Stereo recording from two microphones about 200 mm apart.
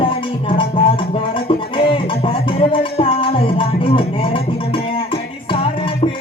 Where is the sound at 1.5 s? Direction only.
25° left (ahead or behind).